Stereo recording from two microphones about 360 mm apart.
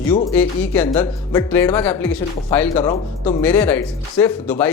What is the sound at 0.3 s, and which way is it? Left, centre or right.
Speech, centre.